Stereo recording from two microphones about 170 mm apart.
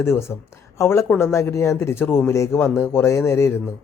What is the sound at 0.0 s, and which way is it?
Speech, 15° left (ahead or behind).